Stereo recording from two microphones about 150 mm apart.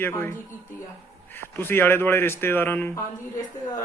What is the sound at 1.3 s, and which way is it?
Speech, 15° left (ahead or behind).